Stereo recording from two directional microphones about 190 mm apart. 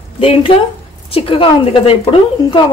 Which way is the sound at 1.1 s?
30° left (ahead or behind).